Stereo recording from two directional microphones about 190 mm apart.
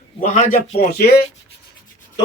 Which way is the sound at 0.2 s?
40° left (ahead or behind).